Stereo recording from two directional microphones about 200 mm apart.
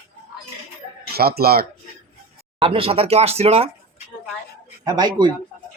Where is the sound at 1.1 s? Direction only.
50° right (ahead or behind).